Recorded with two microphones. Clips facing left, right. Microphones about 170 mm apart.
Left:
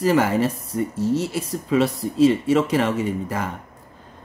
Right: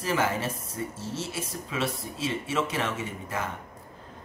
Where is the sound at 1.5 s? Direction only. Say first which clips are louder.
Left 13 dB; 60° left (ahead or behind).